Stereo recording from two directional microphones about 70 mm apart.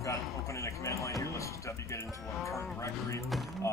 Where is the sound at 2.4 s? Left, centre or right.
Left.